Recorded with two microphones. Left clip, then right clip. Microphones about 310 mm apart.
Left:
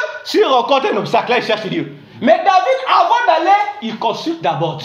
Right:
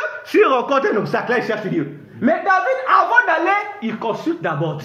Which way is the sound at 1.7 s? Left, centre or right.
Left.